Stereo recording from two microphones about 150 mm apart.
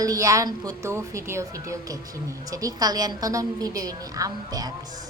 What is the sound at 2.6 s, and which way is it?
A woman's voice, 25° right (ahead or behind).